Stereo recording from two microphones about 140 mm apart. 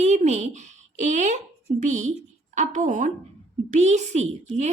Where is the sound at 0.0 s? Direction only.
55° right (ahead or behind).